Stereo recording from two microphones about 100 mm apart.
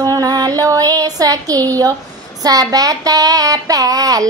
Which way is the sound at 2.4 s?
40° right (ahead or behind).